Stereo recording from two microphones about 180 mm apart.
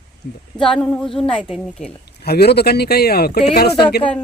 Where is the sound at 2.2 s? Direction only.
65° left (ahead or behind).